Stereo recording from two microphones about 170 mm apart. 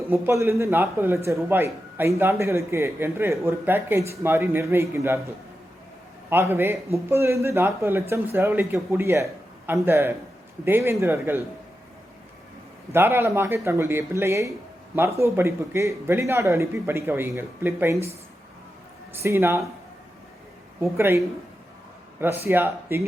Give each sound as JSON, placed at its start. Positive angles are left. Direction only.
{"t": 0.1, "sound": "a man's voice", "side_deg": -15}
{"t": 6.3, "sound": "a man's voice", "side_deg": -10}
{"t": 12.9, "sound": "a man's voice", "side_deg": -15}
{"t": 19.2, "sound": "a man's voice", "side_deg": -15}
{"t": 20.9, "sound": "a man's voice", "side_deg": -15}
{"t": 22.2, "sound": "a man's voice", "side_deg": -15}